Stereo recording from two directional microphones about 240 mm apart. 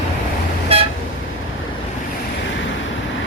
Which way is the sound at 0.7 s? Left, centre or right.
Right.